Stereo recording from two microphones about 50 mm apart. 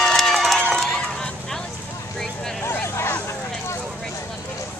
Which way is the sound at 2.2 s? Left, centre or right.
Centre.